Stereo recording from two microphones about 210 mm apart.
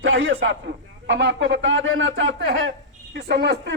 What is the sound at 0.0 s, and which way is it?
A man's voice, 65° right (ahead or behind).